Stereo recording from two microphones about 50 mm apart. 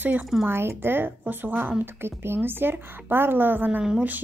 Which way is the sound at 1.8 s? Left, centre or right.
Right.